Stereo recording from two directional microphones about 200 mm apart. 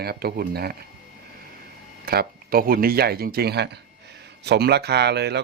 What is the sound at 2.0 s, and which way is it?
Speech, 50° right (ahead or behind).